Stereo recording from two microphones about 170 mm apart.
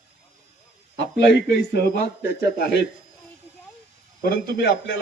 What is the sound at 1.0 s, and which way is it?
A man's voice, 90° left.